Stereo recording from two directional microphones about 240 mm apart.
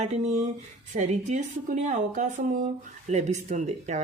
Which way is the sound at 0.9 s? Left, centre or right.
Right.